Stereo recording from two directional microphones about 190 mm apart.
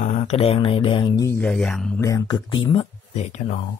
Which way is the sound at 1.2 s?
10° left (ahead or behind).